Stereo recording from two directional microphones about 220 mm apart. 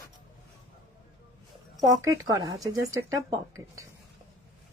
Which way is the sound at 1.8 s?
15° right (ahead or behind).